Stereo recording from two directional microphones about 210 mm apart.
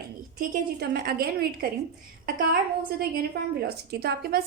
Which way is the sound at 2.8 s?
45° right (ahead or behind).